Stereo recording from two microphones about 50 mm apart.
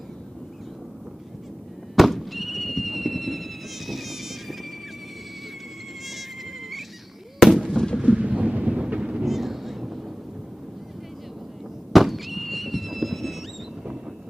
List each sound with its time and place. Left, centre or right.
2.0 s a sound: centre
7.3 s fireworks: centre
7.7 s artillery fire: centre
8.0 s a sound: right
9.2 s thunder: centre
11.9 s fireworks: centre